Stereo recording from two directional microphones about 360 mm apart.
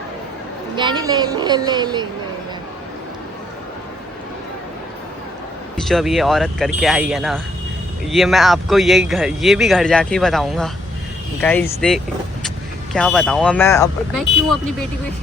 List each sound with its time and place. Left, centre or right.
0.8 s a woman's voice: centre
5.8 s speech: centre